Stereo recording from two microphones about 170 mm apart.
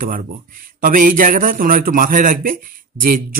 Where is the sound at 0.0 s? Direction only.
55° right (ahead or behind).